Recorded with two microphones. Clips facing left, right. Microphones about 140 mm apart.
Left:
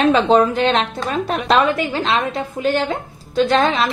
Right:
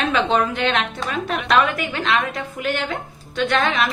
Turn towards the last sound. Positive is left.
turn(degrees=30)  # may be behind; listen again after turning